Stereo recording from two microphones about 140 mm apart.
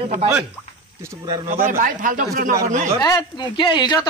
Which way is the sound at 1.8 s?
75° right (ahead or behind).